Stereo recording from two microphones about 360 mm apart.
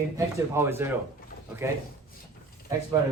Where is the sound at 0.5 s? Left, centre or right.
Centre.